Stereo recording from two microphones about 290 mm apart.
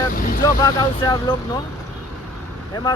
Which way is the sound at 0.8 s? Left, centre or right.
Centre.